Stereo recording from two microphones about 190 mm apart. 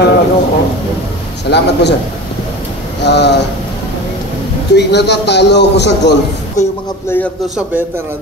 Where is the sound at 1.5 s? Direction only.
60° left (ahead or behind).